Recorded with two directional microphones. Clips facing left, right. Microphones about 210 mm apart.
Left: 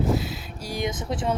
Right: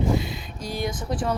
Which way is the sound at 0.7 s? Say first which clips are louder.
Even; 20° left (ahead or behind).